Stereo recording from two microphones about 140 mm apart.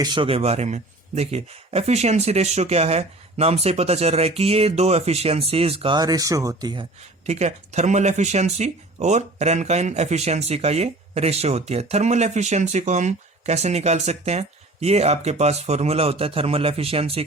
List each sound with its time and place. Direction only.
0.0 s speech: 35° right (ahead or behind)
6.0 s speech: 25° right (ahead or behind)
7.3 s speech: 55° right (ahead or behind)